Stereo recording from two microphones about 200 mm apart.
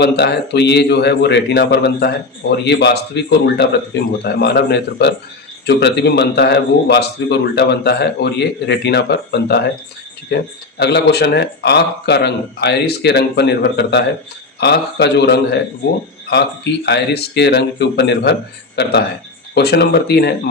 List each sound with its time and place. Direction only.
0.0 s a man's voice: 55° left (ahead or behind)
16.8 s a man's voice: 55° left (ahead or behind)